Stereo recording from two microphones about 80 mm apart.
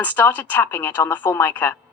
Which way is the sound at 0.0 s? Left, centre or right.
Left.